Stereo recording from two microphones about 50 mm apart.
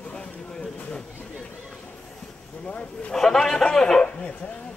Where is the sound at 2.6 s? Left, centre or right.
Left.